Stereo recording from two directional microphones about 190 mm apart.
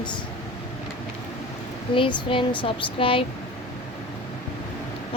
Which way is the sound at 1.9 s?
25° left (ahead or behind).